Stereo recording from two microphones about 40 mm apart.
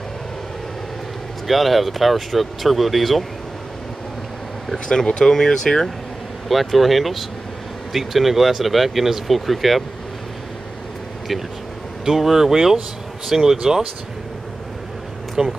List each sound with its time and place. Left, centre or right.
1.5 s speech: centre
4.8 s speech: centre
6.5 s speech: centre
12.0 s speech: centre
15.4 s speech: centre